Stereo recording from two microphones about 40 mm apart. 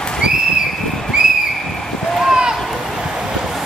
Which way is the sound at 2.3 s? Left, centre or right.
Centre.